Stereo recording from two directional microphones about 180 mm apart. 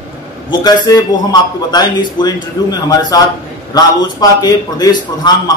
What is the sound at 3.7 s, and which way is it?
A man's voice, 20° left (ahead or behind).